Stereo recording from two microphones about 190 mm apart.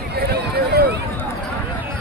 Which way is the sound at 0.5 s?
50° right (ahead or behind).